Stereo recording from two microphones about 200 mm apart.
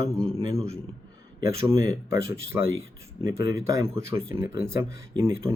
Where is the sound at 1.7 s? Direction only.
15° right (ahead or behind).